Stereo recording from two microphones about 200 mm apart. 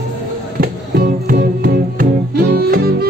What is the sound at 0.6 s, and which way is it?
Music, 50° right (ahead or behind).